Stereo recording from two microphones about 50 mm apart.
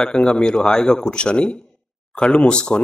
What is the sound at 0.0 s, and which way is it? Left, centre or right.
Speech, centre.